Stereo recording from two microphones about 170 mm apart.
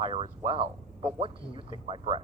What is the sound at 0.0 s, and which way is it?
Speech, 30° right (ahead or behind).